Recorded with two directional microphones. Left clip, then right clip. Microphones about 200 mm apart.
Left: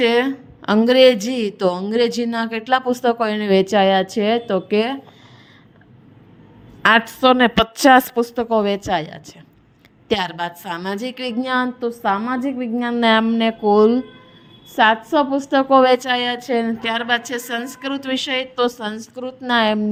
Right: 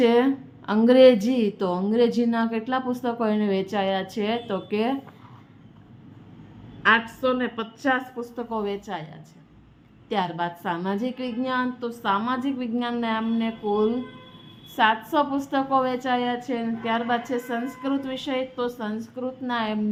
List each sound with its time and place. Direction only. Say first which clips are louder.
0.0 s a woman's voice: left 3 dB; 35° left (ahead or behind)
6.8 s a woman's voice: left 7 dB; 60° left (ahead or behind); by 13.0 s 30° left (ahead or behind)
13.0 s a woman's voice: left 16 dB; 45° left (ahead or behind)
14.8 s a woman's voice: left 6 dB; 30° left (ahead or behind)